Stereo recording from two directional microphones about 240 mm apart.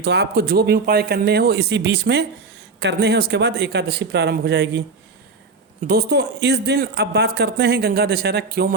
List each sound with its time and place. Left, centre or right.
0.0 s speech: right
5.9 s speech: right